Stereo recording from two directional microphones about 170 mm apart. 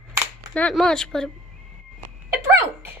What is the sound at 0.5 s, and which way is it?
Speech, 5° left (ahead or behind).